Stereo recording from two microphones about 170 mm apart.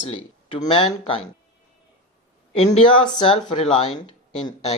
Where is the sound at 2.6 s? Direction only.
30° left (ahead or behind).